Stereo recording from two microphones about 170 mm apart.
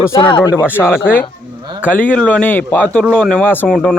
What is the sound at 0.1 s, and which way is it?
Speech, 25° left (ahead or behind).